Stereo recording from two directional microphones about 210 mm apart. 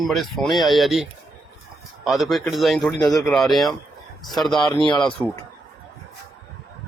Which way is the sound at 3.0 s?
15° left (ahead or behind).